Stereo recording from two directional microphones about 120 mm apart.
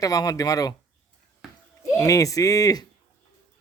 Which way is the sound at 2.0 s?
30° left (ahead or behind).